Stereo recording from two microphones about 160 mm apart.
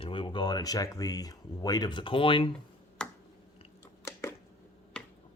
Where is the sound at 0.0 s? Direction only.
30° left (ahead or behind).